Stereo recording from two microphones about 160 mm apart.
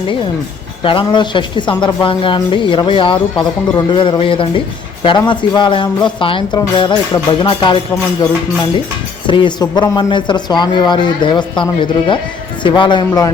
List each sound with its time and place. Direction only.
0.8 s speech: 35° left (ahead or behind)
9.2 s speech: 30° left (ahead or behind)